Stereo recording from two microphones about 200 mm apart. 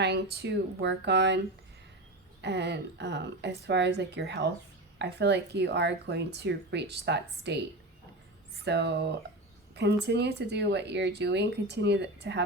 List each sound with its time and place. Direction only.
0.0 s speech: 55° right (ahead or behind)
2.4 s speech: 60° right (ahead or behind)
8.6 s speech: 55° right (ahead or behind)